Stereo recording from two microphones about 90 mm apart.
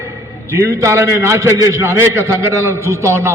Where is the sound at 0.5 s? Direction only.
30° right (ahead or behind).